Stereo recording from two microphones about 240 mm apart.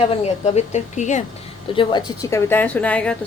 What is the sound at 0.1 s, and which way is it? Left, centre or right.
Speech, left.